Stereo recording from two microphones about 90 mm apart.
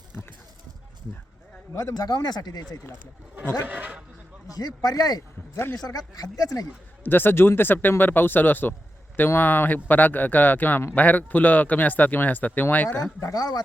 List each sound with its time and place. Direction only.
1.7 s speech: 45° left (ahead or behind)
3.7 s a sound: 15° right (ahead or behind)
4.5 s speech: 45° left (ahead or behind)
7.0 s speech: 25° left (ahead or behind)
13.1 s speech: 40° left (ahead or behind)